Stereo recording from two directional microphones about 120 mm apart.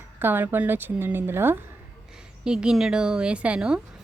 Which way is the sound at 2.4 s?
5° right (ahead or behind).